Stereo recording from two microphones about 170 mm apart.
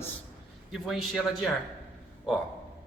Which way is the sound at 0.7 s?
Centre (ahead or behind).